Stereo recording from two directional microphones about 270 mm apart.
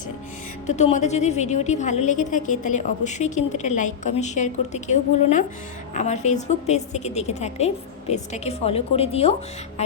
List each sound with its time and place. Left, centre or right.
0.7 s a woman's voice: left